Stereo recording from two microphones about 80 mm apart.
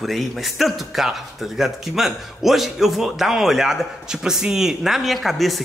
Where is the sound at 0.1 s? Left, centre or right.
Centre.